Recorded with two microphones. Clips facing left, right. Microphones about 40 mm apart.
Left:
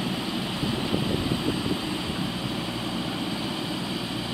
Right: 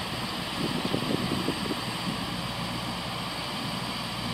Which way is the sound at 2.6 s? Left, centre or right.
Left.